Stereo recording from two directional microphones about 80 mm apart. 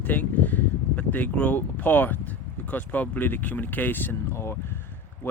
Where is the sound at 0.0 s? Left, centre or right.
Left.